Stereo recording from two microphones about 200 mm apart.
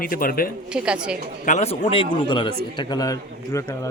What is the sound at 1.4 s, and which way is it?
A man's voice, 35° left (ahead or behind).